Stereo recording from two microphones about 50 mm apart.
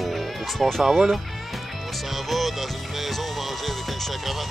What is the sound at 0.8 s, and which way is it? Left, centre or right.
Speech, centre.